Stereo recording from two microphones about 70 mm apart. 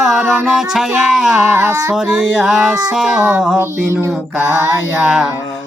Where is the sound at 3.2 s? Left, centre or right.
Right.